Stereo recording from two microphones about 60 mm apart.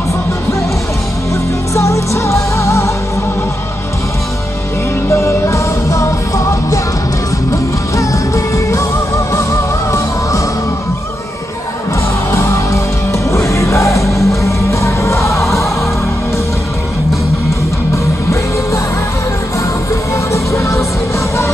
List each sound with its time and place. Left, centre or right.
1.8 s music: left
5.1 s music: left
8.5 s music: left
12.3 s music: left
17.9 s music: left